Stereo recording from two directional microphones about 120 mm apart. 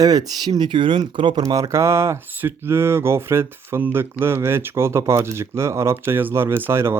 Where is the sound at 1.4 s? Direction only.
30° right (ahead or behind).